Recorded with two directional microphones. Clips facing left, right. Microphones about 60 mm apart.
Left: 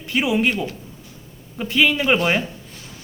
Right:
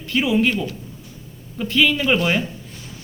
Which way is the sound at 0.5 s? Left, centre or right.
Left.